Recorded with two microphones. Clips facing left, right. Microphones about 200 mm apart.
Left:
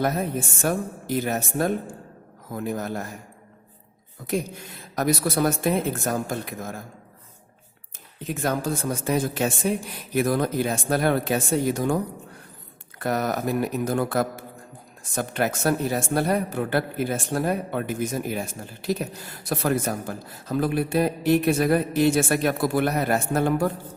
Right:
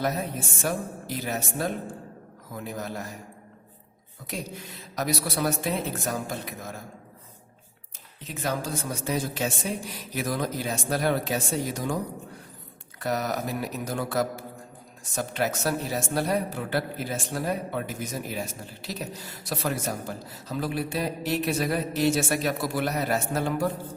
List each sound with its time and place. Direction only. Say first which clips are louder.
0.0 s a woman's voice: left 4 dB; 50° left (ahead or behind)
4.8 s a woman's voice: left 5 dB; 50° left (ahead or behind)
8.3 s a woman's voice: left 5 dB; 50° left (ahead or behind)
13.0 s a woman's voice: left 3 dB; 55° left (ahead or behind)